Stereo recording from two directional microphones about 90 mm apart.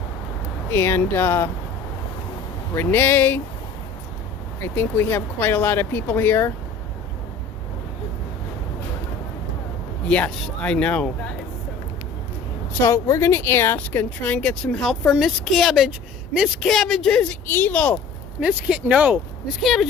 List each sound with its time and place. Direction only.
0.7 s speech: 25° left (ahead or behind)
2.7 s speech: 25° left (ahead or behind)
4.6 s speech: 25° left (ahead or behind)
10.1 s speech: 15° left (ahead or behind)
12.9 s speech: 30° left (ahead or behind)
14.8 s a woman's voice: 5° left (ahead or behind)
16.6 s a woman's voice: centre (ahead or behind)
17.4 s speech: 20° left (ahead or behind)
18.3 s speech: 10° right (ahead or behind)
19.6 s a woman's voice: centre (ahead or behind)